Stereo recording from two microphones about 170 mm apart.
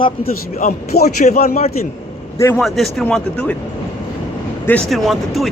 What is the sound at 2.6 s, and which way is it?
Speech, centre (ahead or behind).